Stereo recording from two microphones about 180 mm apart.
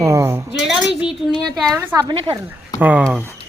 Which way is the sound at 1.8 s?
15° right (ahead or behind).